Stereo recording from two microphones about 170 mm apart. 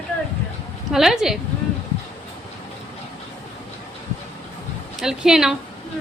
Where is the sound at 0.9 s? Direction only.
Centre (ahead or behind).